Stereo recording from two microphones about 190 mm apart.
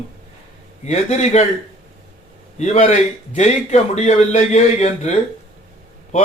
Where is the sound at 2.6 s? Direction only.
35° left (ahead or behind).